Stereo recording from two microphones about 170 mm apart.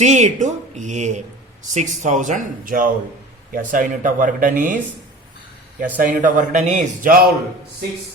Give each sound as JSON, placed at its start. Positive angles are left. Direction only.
{"t": 0.0, "sound": "a man's voice", "side_deg": -45}
{"t": 6.0, "sound": "a man's voice", "side_deg": -50}